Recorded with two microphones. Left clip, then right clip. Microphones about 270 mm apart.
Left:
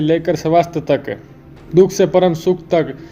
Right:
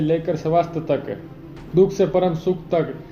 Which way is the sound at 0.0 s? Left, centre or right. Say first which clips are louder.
Left 5 dB; left.